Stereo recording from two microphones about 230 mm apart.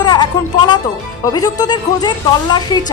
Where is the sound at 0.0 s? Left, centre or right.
Centre.